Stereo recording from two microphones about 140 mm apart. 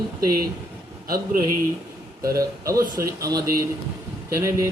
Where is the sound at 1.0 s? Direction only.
90° right.